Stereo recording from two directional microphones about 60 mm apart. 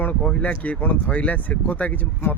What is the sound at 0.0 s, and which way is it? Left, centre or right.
Speech, left.